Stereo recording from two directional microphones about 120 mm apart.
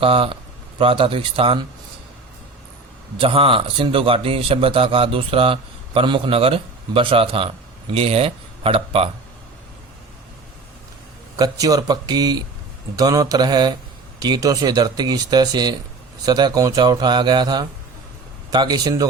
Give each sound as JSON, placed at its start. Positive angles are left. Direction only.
{"t": 0.0, "sound": "a man's voice", "side_deg": -50}
{"t": 3.2, "sound": "a man's voice", "side_deg": -50}
{"t": 11.3, "sound": "speech", "side_deg": -30}